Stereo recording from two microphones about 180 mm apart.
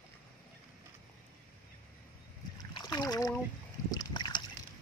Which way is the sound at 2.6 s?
20° left (ahead or behind).